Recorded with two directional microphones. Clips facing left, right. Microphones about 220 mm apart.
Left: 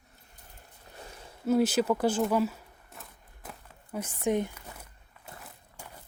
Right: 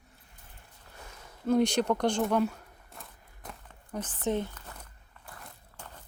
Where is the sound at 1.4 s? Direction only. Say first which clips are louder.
Left 1 dB; 5° left (ahead or behind).